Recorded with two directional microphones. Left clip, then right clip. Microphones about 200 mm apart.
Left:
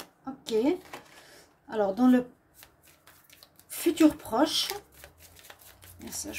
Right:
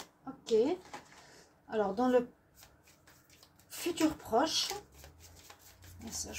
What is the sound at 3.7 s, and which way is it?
Speech, 45° left (ahead or behind).